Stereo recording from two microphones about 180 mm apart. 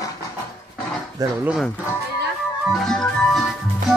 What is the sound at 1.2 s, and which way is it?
Speech, 20° right (ahead or behind).